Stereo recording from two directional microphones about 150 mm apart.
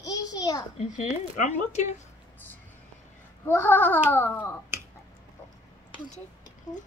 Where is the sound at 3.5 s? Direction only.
15° left (ahead or behind).